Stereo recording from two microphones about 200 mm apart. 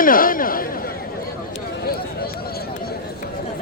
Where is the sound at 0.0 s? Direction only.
45° left (ahead or behind).